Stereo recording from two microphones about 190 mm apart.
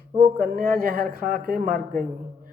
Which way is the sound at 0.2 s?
50° right (ahead or behind).